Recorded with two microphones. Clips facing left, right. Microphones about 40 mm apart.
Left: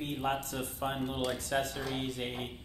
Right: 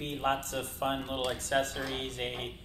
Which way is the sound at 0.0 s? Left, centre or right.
Right.